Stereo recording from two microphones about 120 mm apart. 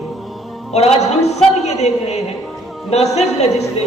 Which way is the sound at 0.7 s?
65° left (ahead or behind).